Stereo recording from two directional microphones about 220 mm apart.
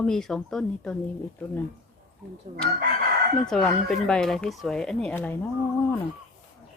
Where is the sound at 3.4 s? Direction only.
Centre (ahead or behind).